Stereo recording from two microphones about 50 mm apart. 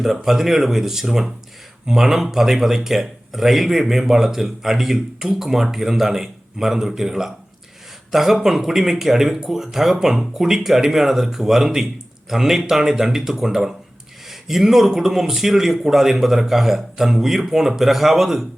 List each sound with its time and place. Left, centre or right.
0.0 s speech: centre